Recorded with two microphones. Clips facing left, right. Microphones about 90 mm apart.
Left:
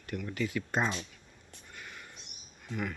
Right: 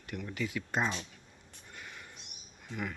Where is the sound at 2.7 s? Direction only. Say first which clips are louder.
Left 2 dB; 15° right (ahead or behind).